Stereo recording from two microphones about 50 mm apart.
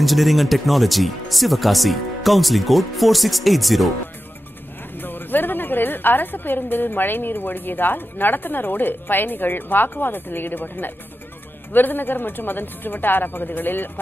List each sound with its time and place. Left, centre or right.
0.0 s speech: centre
5.0 s a woman's voice: left